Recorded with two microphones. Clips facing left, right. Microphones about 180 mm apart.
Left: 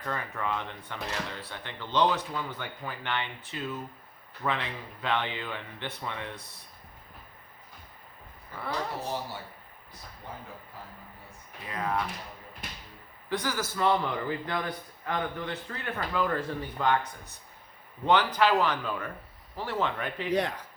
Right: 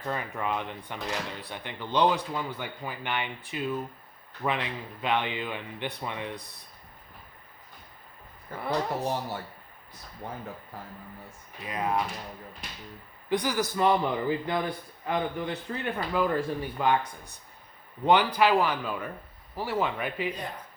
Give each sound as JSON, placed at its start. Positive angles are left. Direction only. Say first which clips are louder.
{"t": 0.0, "sound": "speech", "louder": "right 2 dB", "side_deg": -15}
{"t": 8.5, "sound": "speech", "louder": "right 4 dB", "side_deg": -50}
{"t": 11.7, "sound": "speech", "louder": "right 2 dB", "side_deg": -15}
{"t": 13.3, "sound": "speech", "louder": "right 4 dB", "side_deg": -15}
{"t": 20.3, "sound": "speech", "louder": "left 10 dB", "side_deg": 85}